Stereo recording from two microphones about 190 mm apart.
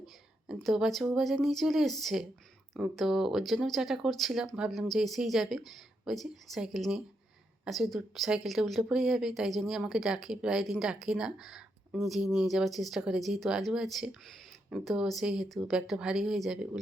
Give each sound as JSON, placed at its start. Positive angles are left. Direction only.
{"t": 0.0, "sound": "a woman's voice", "side_deg": 0}